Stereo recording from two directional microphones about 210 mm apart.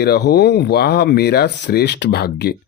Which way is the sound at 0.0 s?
50° left (ahead or behind).